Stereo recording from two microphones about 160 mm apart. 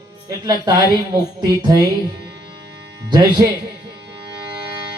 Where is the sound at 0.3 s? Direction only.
25° right (ahead or behind).